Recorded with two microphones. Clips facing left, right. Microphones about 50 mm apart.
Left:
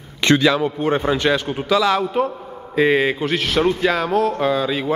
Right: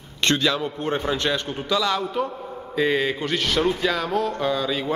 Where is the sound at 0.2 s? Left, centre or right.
Centre.